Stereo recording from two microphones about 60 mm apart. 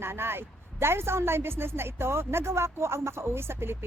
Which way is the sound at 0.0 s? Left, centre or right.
Right.